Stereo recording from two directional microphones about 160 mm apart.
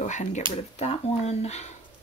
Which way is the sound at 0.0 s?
50° left (ahead or behind).